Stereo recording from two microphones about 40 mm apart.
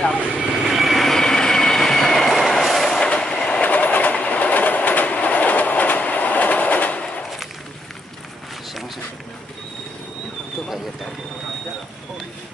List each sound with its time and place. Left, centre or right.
0.6 s vehicle: centre
1.0 s train: centre
3.1 s train: left
3.6 s train: left